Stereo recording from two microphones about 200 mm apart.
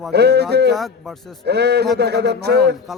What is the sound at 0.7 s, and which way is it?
Speech, centre (ahead or behind).